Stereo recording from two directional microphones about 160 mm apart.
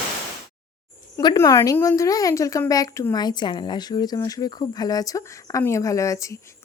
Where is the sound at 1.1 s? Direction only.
20° left (ahead or behind).